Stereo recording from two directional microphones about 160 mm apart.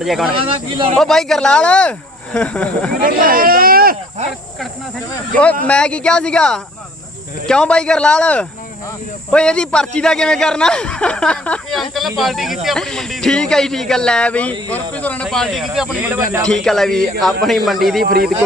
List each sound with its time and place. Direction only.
0.0 s speech: centre (ahead or behind)
0.3 s speech: 35° right (ahead or behind)
0.9 s speech: centre (ahead or behind)
3.0 s speech: 60° right (ahead or behind)
5.6 s speech: 5° left (ahead or behind); by 16.5 s 15° right (ahead or behind)
16.5 s speech: 5° left (ahead or behind)
18.0 s speech: 75° right (ahead or behind)